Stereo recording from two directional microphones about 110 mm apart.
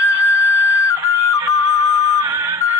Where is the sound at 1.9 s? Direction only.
25° right (ahead or behind).